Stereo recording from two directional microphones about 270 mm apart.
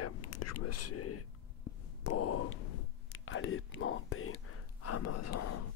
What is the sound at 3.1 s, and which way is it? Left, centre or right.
Whispering, left.